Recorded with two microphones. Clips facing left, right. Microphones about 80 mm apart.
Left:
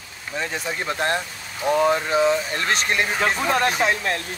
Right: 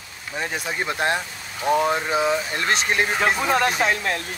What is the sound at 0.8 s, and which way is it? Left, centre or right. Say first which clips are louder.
Speech: even; centre.